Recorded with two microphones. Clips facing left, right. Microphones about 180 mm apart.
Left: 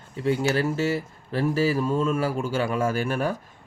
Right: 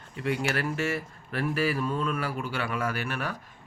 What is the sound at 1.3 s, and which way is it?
Speech, 35° left (ahead or behind).